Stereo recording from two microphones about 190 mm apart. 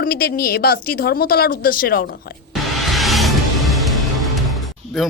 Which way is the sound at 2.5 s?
Centre (ahead or behind).